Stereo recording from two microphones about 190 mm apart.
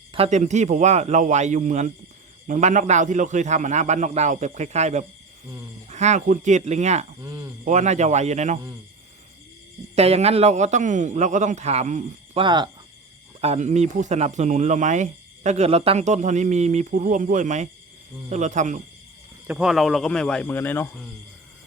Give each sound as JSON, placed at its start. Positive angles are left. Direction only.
{"t": 0.1, "sound": "speech", "side_deg": -35}
{"t": 7.2, "sound": "speech", "side_deg": -20}
{"t": 7.6, "sound": "speech", "side_deg": -40}
{"t": 9.9, "sound": "speech", "side_deg": -35}
{"t": 12.4, "sound": "speech", "side_deg": -25}
{"t": 13.4, "sound": "speech", "side_deg": -35}
{"t": 19.5, "sound": "speech", "side_deg": -5}